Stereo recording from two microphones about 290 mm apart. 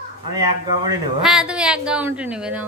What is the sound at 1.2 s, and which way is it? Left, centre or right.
A woman's voice, centre.